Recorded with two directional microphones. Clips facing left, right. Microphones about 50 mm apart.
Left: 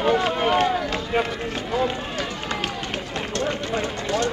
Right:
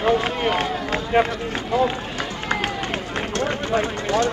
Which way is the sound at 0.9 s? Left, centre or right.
Right.